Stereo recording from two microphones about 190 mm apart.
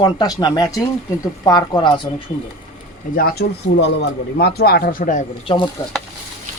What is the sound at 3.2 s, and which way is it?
Speech, 55° left (ahead or behind).